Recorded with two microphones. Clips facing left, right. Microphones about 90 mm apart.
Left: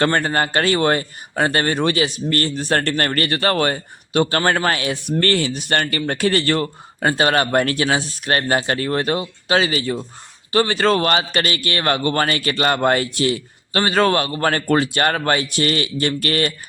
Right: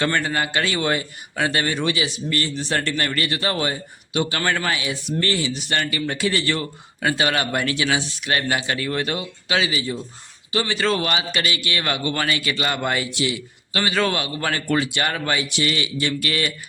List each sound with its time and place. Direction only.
0.0 s speech: 45° left (ahead or behind)
10.5 s speech: 45° left (ahead or behind)